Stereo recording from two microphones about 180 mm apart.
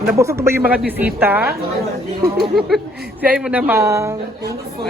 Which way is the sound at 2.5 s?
Centre (ahead or behind).